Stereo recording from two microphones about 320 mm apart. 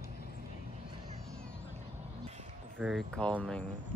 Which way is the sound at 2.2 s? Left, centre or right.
Right.